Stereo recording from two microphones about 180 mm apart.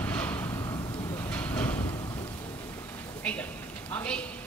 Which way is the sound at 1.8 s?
20° left (ahead or behind).